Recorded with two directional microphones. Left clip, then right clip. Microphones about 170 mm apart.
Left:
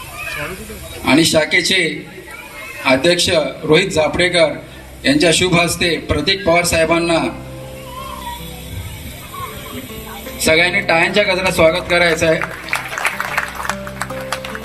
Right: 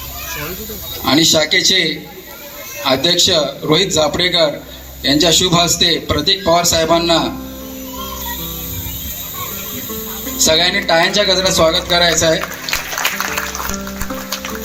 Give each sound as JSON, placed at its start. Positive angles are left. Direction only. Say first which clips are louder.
{"t": 1.0, "sound": "a man's voice", "louder": "right 1 dB", "side_deg": 20}
{"t": 2.8, "sound": "a man's voice", "louder": "even", "side_deg": 25}
{"t": 10.4, "sound": "a man's voice", "louder": "even", "side_deg": 25}